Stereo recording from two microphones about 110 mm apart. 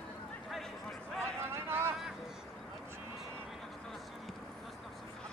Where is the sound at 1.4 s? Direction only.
20° right (ahead or behind).